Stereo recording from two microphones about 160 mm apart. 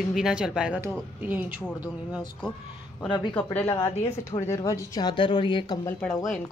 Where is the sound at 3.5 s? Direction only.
15° left (ahead or behind).